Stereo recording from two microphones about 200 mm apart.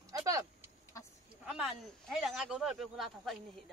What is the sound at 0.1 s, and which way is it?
Vehicle, 15° right (ahead or behind).